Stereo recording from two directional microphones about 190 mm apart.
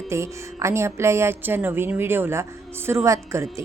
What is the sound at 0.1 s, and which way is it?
A woman's voice, 15° right (ahead or behind).